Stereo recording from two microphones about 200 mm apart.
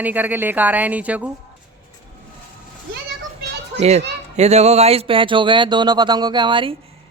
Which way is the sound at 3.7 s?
35° right (ahead or behind).